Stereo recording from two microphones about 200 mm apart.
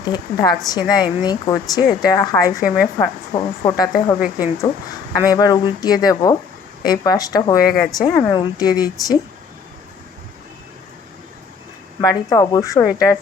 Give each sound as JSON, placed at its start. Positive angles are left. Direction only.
{"t": 0.0, "sound": "a woman's voice", "side_deg": 20}
{"t": 4.2, "sound": "speech", "side_deg": -5}
{"t": 5.1, "sound": "speech", "side_deg": 20}
{"t": 7.7, "sound": "speech", "side_deg": 0}
{"t": 7.9, "sound": "speech", "side_deg": 20}
{"t": 11.9, "sound": "a woman's voice", "side_deg": 20}